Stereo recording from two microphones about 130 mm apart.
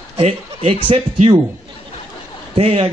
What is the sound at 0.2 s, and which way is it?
A man's voice, 50° right (ahead or behind).